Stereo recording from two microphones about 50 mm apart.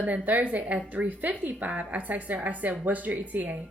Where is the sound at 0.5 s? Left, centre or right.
Right.